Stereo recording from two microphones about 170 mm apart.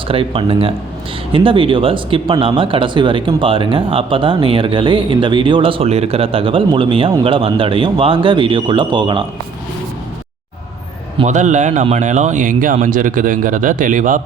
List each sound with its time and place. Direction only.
0.1 s speech: 30° right (ahead or behind)
11.3 s speech: 45° right (ahead or behind)